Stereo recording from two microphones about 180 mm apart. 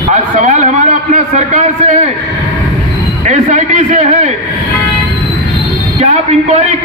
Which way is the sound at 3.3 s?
45° right (ahead or behind).